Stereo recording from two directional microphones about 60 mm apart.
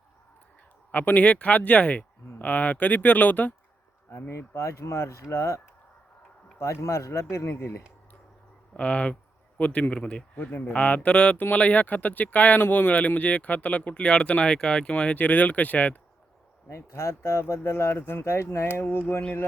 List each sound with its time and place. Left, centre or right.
0.9 s speech: left
4.1 s speech: left
8.7 s speech: centre
16.6 s speech: left